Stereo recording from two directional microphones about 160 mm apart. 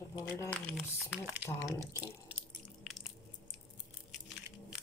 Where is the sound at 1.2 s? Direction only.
10° right (ahead or behind).